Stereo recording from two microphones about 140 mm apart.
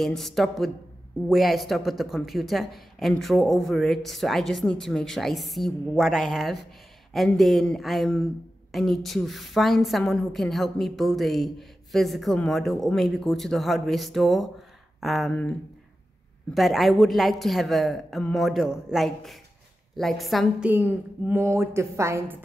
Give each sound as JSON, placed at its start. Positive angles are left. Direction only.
{"t": 0.0, "sound": "a woman's voice", "side_deg": 0}
{"t": 16.5, "sound": "a woman's voice", "side_deg": 0}
{"t": 20.7, "sound": "a woman's voice", "side_deg": -15}